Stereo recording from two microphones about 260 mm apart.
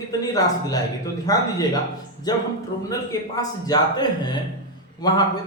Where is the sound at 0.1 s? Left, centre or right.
Centre.